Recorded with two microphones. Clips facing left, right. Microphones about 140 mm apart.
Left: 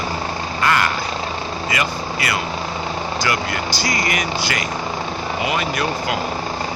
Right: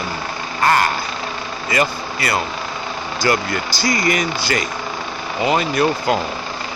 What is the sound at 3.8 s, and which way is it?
Speech, 30° right (ahead or behind).